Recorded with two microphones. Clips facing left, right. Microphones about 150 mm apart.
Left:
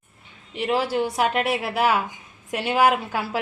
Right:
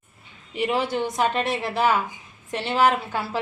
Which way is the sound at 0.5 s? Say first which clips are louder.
Left 1 dB; centre (ahead or behind).